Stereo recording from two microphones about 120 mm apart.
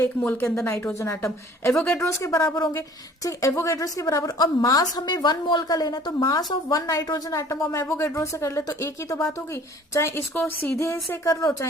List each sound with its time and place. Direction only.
0.3 s a woman's voice: 20° left (ahead or behind)
1.7 s speech: 10° left (ahead or behind)
2.0 s a woman's voice: 25° left (ahead or behind)